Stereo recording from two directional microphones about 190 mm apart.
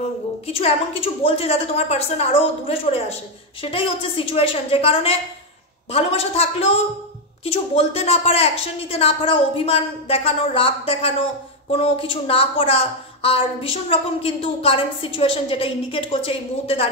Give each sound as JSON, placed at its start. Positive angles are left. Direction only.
{"t": 0.5, "sound": "a woman's voice", "side_deg": 30}